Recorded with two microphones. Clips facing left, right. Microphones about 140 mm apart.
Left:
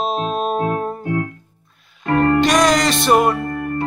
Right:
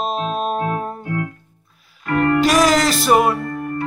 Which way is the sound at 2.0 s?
30° left (ahead or behind).